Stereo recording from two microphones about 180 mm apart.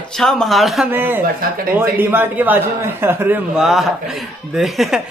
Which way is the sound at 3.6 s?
Centre (ahead or behind).